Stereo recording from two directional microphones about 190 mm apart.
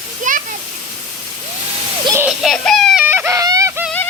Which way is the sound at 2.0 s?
15° right (ahead or behind).